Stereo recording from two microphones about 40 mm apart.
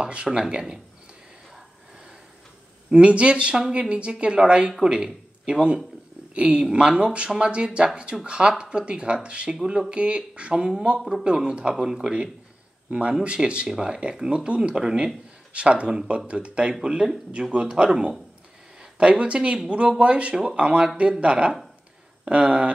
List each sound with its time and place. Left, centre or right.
0.0 s speech: right
2.9 s speech: right
6.3 s a woman's voice: right
11.0 s speech: centre; by 22.7 s right